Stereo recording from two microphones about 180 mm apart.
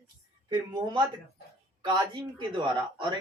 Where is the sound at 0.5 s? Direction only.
25° right (ahead or behind).